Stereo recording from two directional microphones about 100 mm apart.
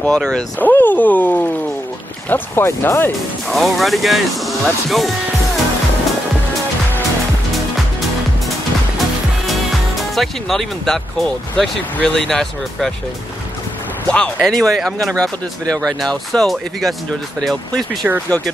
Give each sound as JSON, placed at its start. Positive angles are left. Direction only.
{"t": 0.0, "sound": "speech", "side_deg": 5}
{"t": 0.6, "sound": "speech", "side_deg": 20}
{"t": 3.4, "sound": "speech", "side_deg": 0}
{"t": 9.9, "sound": "speech", "side_deg": 0}
{"t": 14.1, "sound": "speech", "side_deg": 5}
{"t": 18.0, "sound": "speech", "side_deg": -10}